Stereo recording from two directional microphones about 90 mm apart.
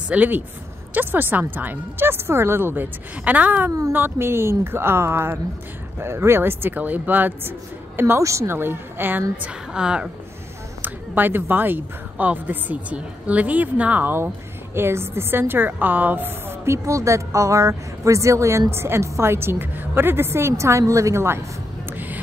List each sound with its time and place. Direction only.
0.1 s a woman's voice: 20° right (ahead or behind)
9.4 s a woman's voice: 10° right (ahead or behind)
10.8 s speech: 20° right (ahead or behind)
21.9 s a sound: 20° right (ahead or behind)